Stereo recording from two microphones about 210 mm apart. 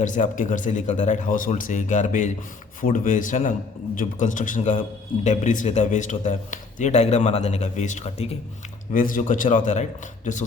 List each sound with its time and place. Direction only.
0.0 s speech: 35° left (ahead or behind)